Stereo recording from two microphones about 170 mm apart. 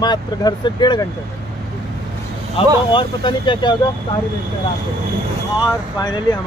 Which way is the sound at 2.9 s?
30° left (ahead or behind).